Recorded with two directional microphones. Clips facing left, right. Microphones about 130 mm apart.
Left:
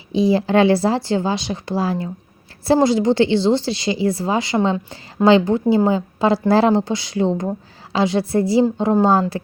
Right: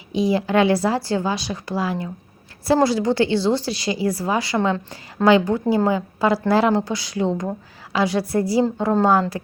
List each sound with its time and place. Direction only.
0.1 s a woman's voice: 30° left (ahead or behind)
9.3 s a woman's voice: 30° left (ahead or behind)